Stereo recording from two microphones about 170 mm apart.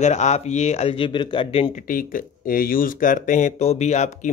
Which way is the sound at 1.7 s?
55° left (ahead or behind).